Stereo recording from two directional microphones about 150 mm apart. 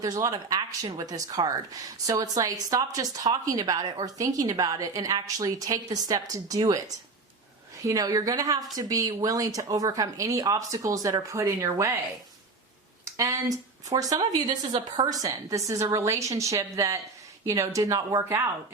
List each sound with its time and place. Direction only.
0.0 s speech: 25° right (ahead or behind)
7.9 s speech: 25° right (ahead or behind)
13.1 s speech: 20° right (ahead or behind)
14.4 s a woman's voice: 35° right (ahead or behind)
15.0 s speech: 25° right (ahead or behind)